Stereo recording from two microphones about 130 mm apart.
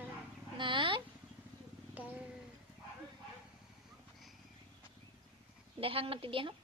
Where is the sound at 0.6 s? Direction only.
40° right (ahead or behind).